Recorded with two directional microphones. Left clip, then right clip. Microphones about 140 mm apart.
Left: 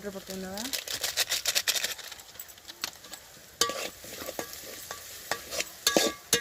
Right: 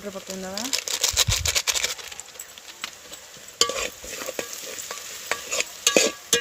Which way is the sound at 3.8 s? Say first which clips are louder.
Right 7 dB; 30° right (ahead or behind).